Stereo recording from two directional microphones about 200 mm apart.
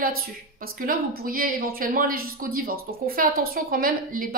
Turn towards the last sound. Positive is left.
turn(degrees=-45)  # may be behind; listen again after turning